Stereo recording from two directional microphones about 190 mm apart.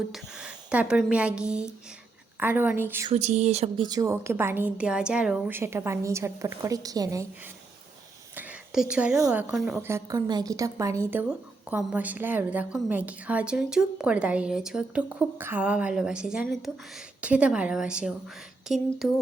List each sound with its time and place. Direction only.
0.1 s a woman's voice: 5° right (ahead or behind)
3.1 s speech: 35° right (ahead or behind)
3.8 s a woman's voice: 15° right (ahead or behind)
8.4 s a sound: 5° right (ahead or behind)
9.1 s a woman's voice: 10° right (ahead or behind)
9.7 s a woman's voice: 15° right (ahead or behind)